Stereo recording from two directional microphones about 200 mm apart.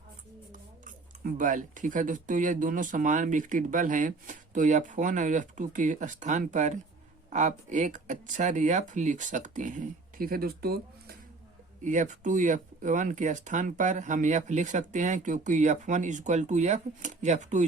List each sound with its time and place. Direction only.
0.9 s speech: 40° right (ahead or behind)
11.8 s speech: 40° right (ahead or behind)